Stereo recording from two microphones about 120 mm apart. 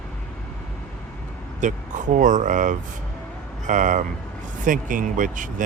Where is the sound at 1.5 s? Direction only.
90° right.